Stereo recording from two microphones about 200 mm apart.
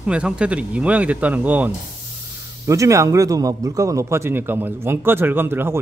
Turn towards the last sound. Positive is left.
turn(degrees=-10)  # may be behind; listen again after turning